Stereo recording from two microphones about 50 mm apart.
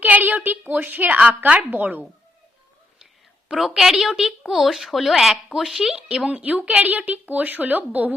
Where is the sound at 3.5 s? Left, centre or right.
Centre.